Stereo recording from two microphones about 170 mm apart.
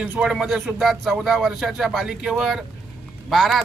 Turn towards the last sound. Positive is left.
turn(degrees=0)  # may be behind; listen again after turning